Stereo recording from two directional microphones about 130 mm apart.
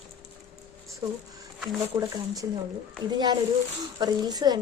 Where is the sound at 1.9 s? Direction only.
15° right (ahead or behind).